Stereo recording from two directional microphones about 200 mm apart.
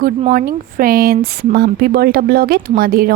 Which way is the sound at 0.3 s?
45° right (ahead or behind).